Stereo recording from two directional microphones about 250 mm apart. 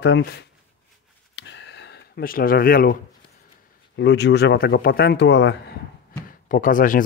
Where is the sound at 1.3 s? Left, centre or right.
Left.